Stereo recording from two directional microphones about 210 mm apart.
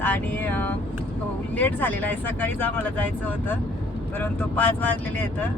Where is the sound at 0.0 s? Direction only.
10° left (ahead or behind).